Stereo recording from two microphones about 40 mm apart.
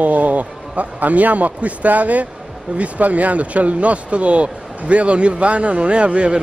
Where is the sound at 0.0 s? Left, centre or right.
Right.